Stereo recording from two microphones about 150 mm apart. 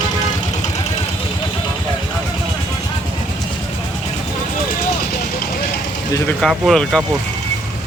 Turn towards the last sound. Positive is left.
turn(degrees=0)  # may be behind; listen again after turning